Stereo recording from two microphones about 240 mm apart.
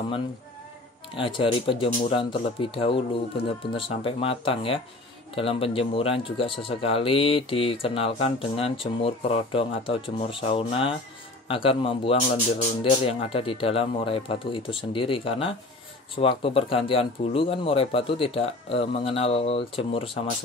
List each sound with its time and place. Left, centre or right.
1.1 s speech: left